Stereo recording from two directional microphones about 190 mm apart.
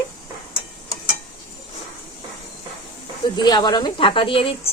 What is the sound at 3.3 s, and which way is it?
A woman's voice, 20° left (ahead or behind).